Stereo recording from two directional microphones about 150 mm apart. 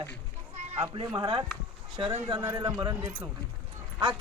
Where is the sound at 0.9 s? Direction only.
35° right (ahead or behind).